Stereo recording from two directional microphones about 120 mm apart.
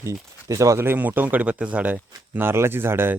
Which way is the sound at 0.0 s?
25° right (ahead or behind).